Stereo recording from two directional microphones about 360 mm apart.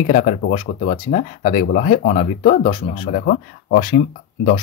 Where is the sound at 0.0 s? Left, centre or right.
Left.